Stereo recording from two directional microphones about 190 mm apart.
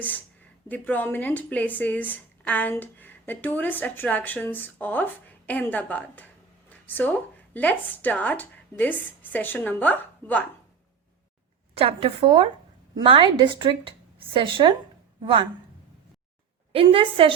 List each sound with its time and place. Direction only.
0.7 s speech: 10° left (ahead or behind)
11.8 s a woman's voice: 30° right (ahead or behind)
16.7 s a woman's voice: 30° right (ahead or behind)